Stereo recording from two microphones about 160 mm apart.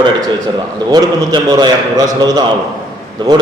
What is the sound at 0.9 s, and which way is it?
A man's voice, 25° right (ahead or behind).